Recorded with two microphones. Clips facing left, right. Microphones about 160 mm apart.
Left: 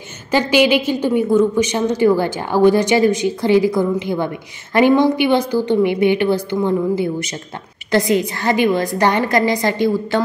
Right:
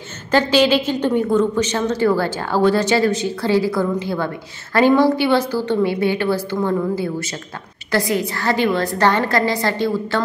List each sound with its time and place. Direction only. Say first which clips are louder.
0.3 s a woman's voice: left 1 dB; 15° left (ahead or behind)